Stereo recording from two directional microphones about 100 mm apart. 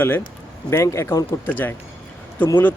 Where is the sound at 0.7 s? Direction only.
30° left (ahead or behind).